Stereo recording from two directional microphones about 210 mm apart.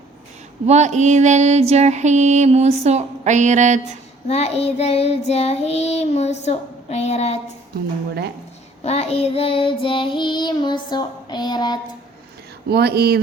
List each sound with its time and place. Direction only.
0.6 s mantra: 30° right (ahead or behind)
4.3 s child singing: 30° left (ahead or behind)
8.8 s child singing: 30° left (ahead or behind)
12.6 s speech: 50° right (ahead or behind)